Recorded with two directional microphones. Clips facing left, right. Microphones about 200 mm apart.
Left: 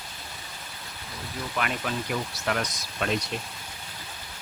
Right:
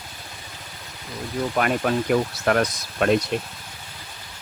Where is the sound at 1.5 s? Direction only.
50° right (ahead or behind).